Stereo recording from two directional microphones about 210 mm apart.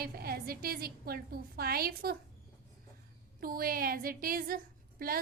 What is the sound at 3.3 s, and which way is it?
A woman's voice, 45° right (ahead or behind).